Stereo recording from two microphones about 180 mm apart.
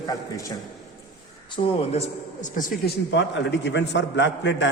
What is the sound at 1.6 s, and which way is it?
Speech, 30° left (ahead or behind).